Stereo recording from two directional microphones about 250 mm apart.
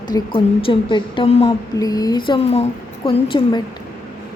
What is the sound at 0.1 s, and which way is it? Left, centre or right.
A woman's voice, left.